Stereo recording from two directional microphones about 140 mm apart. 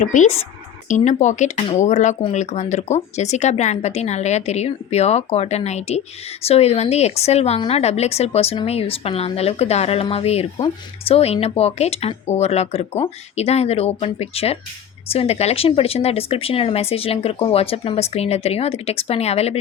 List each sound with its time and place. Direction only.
0.1 s speech: 55° left (ahead or behind)